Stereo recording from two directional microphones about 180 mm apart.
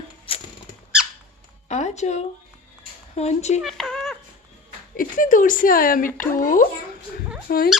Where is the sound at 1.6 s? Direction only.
40° left (ahead or behind).